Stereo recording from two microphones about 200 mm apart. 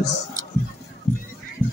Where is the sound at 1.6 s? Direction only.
10° left (ahead or behind).